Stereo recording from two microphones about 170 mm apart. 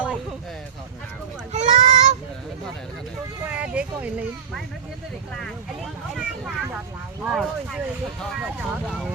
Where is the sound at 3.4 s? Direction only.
10° right (ahead or behind).